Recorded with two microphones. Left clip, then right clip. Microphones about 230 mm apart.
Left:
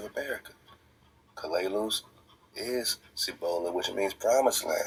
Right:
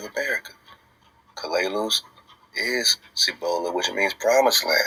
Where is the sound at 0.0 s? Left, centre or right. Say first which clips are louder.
Right 9 dB; right.